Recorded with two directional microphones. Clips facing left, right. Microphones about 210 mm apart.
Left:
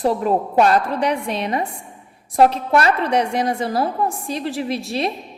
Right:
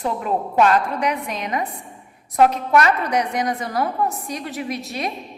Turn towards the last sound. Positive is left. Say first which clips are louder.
# left 4 dB
turn(degrees=30)  # may be behind; listen again after turning